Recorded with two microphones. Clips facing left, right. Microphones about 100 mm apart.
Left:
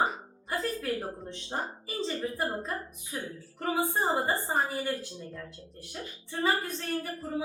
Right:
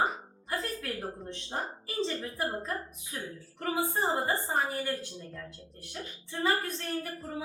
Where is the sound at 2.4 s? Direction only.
Centre (ahead or behind).